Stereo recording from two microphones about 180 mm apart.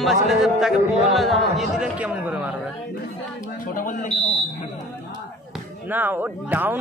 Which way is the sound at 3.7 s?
45° left (ahead or behind).